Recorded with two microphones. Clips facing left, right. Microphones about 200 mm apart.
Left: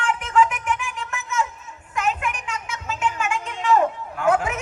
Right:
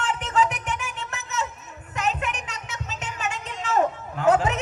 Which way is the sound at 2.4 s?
40° right (ahead or behind).